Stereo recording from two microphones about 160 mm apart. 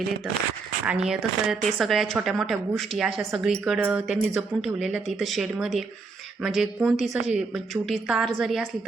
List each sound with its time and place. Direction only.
0.9 s speech: 5° right (ahead or behind)
3.6 s a woman's voice: 10° right (ahead or behind)